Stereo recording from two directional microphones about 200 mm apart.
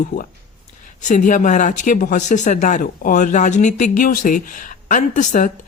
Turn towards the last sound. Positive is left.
turn(degrees=40)  # may be behind; listen again after turning